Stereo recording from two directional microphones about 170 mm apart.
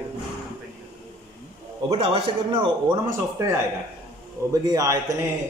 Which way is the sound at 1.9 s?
35° right (ahead or behind).